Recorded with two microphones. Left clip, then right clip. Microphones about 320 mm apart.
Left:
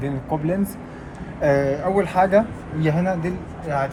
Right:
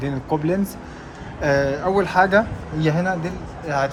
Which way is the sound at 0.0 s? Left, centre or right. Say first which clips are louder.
Right 2 dB; centre.